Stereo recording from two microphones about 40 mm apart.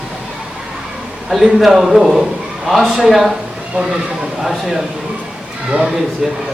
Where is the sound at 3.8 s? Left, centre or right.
Right.